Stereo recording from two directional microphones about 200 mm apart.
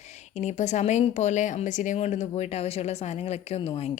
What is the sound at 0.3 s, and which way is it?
Speech, 35° left (ahead or behind).